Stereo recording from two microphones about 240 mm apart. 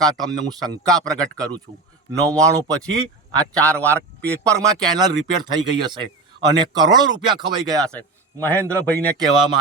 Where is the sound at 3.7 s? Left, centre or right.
Centre.